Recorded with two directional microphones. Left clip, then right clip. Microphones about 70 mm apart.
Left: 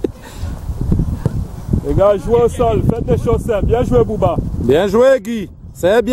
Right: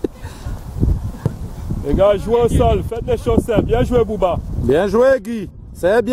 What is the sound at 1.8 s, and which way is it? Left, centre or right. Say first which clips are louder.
Speech: left 1 dB; right.